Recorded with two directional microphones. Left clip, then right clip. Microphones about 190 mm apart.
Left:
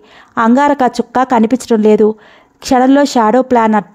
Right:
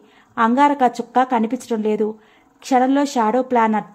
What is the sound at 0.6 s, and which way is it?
A woman's voice, 45° left (ahead or behind).